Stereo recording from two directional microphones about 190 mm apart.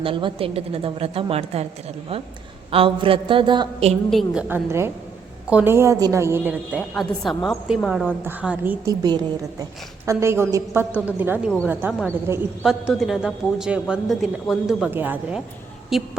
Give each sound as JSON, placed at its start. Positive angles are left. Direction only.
{"t": 0.0, "sound": "a woman's voice", "side_deg": -25}
{"t": 2.7, "sound": "a woman's voice", "side_deg": -30}
{"t": 4.1, "sound": "a man's voice", "side_deg": 0}
{"t": 4.4, "sound": "a woman's voice", "side_deg": -10}
{"t": 12.8, "sound": "a man's voice", "side_deg": 0}